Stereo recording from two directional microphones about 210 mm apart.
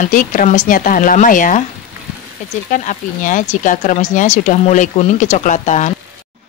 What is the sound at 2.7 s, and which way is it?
Speech, 35° left (ahead or behind).